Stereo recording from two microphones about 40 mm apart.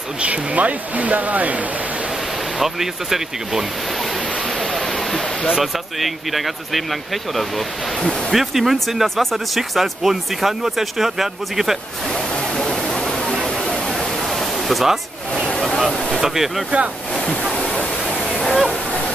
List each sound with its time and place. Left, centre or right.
0.2 s speech: right
2.6 s speech: centre
4.5 s a sound: centre
5.6 s speech: centre
9.6 s speech: centre
12.1 s waterfall: centre
14.2 s pink noise: centre
16.1 s speech: centre
17.1 s ocean: left
18.0 s waterfall: centre